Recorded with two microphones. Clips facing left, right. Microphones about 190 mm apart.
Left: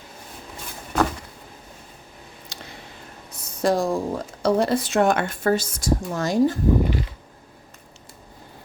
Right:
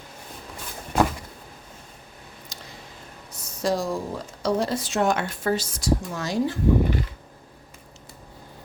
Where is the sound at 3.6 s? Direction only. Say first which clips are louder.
Left 4 dB; 55° left (ahead or behind).